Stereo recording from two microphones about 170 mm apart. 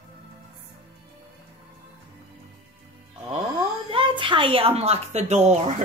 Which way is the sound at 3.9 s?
30° right (ahead or behind).